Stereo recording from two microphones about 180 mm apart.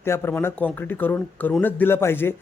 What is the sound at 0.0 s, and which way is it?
Speech, 15° left (ahead or behind).